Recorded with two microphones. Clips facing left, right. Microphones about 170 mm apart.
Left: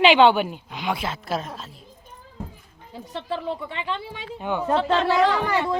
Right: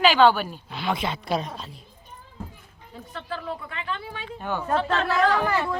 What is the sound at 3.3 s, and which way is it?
A woman's voice, 25° left (ahead or behind).